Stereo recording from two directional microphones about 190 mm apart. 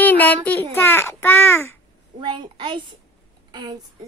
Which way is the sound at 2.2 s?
25° right (ahead or behind).